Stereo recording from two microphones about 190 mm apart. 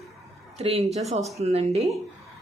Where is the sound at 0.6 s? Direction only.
30° right (ahead or behind).